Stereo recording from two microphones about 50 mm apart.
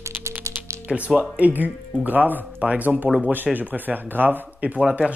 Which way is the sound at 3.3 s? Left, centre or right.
Right.